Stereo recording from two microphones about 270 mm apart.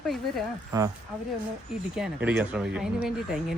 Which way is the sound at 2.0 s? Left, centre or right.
Centre.